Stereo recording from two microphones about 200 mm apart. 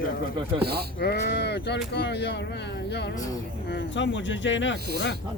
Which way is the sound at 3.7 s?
60° left (ahead or behind).